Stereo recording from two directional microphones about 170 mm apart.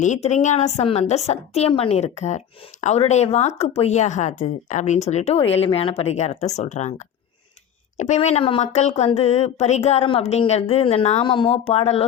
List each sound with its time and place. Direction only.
0.0 s speech: 45° left (ahead or behind)